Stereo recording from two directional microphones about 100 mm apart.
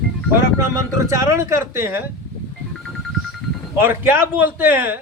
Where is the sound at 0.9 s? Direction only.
30° right (ahead or behind).